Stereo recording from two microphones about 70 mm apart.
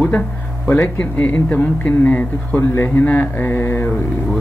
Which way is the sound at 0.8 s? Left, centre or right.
Left.